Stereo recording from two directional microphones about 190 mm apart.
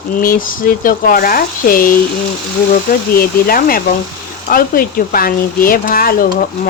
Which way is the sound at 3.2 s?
50° left (ahead or behind).